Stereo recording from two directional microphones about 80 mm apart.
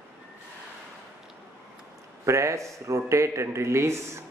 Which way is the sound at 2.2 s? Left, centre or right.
Right.